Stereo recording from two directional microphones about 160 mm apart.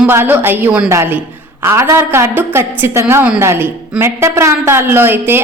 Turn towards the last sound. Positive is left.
turn(degrees=-15)  # may be behind; listen again after turning